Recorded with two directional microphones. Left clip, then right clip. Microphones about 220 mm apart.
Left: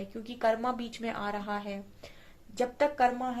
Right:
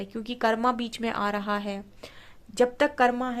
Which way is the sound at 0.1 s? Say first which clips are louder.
Right 3 dB; 45° right (ahead or behind).